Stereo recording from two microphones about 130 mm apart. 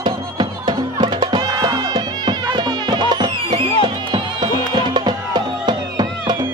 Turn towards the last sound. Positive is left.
turn(degrees=-35)  # may be behind; listen again after turning